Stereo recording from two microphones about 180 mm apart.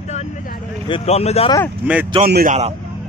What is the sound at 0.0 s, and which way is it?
Vehicle, 40° left (ahead or behind).